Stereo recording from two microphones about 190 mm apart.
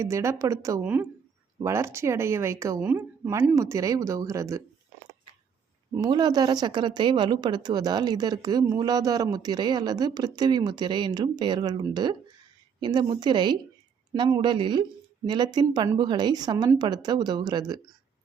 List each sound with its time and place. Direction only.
0.0 s speech: 15° right (ahead or behind)
5.9 s speech: 20° right (ahead or behind)